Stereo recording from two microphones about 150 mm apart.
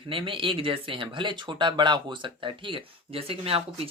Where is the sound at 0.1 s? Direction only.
35° right (ahead or behind).